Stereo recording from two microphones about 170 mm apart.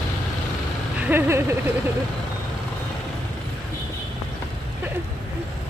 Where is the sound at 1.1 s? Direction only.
15° right (ahead or behind).